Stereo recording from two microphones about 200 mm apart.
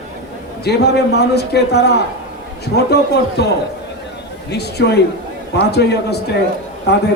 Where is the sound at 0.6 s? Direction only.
55° left (ahead or behind).